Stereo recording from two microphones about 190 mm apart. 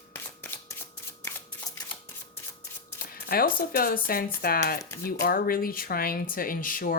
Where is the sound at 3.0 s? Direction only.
50° left (ahead or behind).